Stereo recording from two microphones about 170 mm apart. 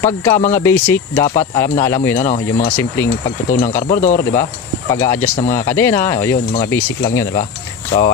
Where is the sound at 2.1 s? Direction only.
45° left (ahead or behind).